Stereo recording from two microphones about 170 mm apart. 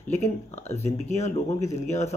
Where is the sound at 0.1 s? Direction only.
40° left (ahead or behind).